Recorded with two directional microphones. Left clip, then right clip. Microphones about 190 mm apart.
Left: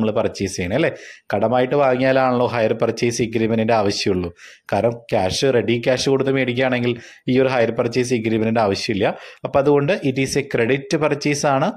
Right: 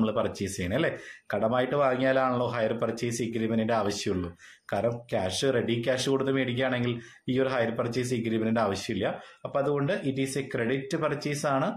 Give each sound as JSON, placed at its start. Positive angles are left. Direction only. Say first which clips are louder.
{"t": 0.0, "sound": "speech", "louder": "left 8 dB", "side_deg": 40}